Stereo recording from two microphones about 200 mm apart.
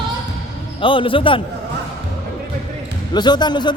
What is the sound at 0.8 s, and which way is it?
Speech, 25° left (ahead or behind).